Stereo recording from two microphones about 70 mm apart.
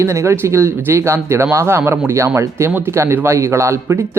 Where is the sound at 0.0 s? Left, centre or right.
Right.